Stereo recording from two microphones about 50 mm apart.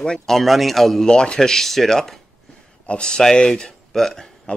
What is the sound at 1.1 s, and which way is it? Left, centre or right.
Speech, centre.